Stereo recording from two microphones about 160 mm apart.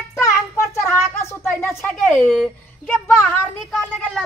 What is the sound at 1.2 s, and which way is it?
A child's voice, 15° left (ahead or behind).